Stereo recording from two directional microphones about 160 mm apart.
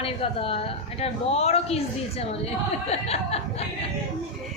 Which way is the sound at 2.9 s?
40° left (ahead or behind).